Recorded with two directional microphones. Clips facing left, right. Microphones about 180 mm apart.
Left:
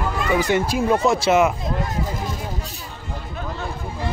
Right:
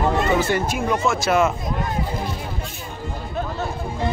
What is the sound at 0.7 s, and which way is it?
Speech, 30° left (ahead or behind).